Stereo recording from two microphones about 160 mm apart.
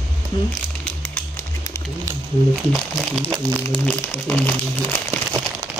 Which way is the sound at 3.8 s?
10° left (ahead or behind).